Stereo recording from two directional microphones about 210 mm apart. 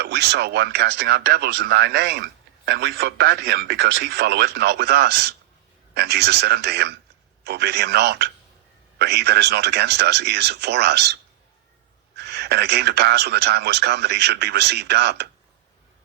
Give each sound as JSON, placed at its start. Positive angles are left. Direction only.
{"t": 0.0, "sound": "speech", "side_deg": -50}